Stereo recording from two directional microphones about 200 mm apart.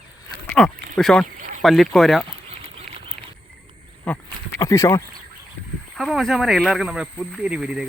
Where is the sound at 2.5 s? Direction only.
30° right (ahead or behind).